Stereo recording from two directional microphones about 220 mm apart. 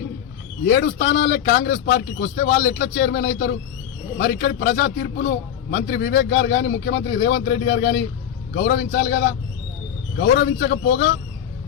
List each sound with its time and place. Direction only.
0.6 s speech: 50° left (ahead or behind)